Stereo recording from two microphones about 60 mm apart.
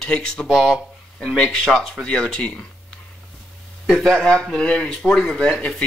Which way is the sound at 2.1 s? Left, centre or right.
Centre.